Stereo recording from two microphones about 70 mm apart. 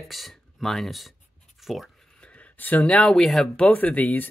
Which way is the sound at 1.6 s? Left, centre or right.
Centre.